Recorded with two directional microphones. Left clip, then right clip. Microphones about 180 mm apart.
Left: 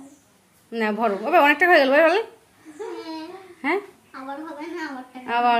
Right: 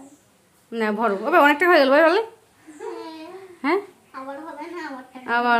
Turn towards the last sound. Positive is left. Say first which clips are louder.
# left 1 dB
turn(degrees=-15)  # may be behind; listen again after turning